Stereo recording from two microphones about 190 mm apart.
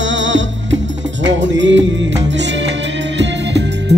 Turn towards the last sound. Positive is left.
turn(degrees=-65)  # may be behind; listen again after turning